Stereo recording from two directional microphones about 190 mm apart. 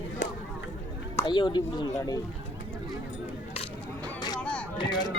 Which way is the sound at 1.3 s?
25° left (ahead or behind).